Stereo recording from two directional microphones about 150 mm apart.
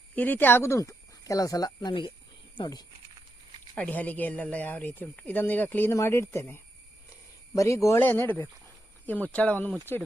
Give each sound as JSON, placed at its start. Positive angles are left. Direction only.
{"t": 0.2, "sound": "speech", "side_deg": 10}
{"t": 3.8, "sound": "speech", "side_deg": 10}